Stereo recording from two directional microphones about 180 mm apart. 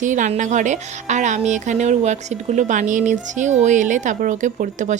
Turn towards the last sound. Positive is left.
turn(degrees=-45)  # may be behind; listen again after turning